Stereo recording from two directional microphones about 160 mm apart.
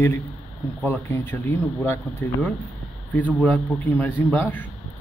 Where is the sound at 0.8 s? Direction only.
10° left (ahead or behind).